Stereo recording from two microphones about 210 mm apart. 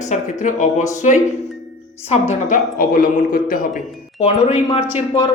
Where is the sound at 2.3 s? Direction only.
40° left (ahead or behind).